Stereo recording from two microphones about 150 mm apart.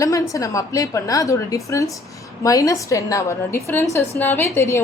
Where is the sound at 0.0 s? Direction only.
20° left (ahead or behind).